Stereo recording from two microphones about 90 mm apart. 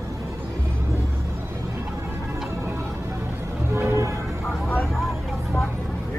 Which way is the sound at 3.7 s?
30° right (ahead or behind).